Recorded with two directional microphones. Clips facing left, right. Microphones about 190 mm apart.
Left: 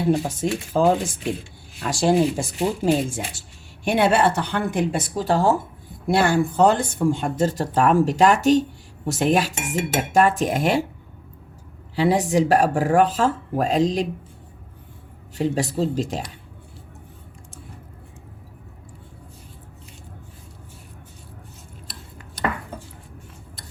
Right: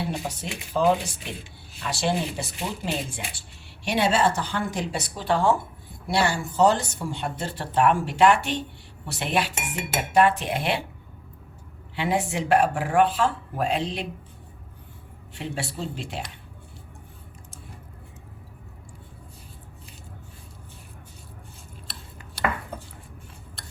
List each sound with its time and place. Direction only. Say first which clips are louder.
0.0 s speech: left 9 dB; 45° left (ahead or behind)
3.8 s speech: left 4 dB; 55° left (ahead or behind)
11.9 s speech: left 7 dB; 35° left (ahead or behind)
15.4 s speech: left 10 dB; 40° left (ahead or behind)